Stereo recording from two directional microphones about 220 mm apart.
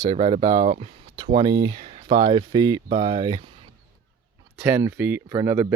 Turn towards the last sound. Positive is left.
turn(degrees=-15)  # may be behind; listen again after turning